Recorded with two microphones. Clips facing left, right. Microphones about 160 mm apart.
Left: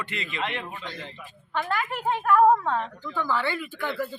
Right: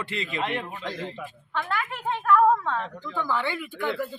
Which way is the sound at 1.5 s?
5° left (ahead or behind).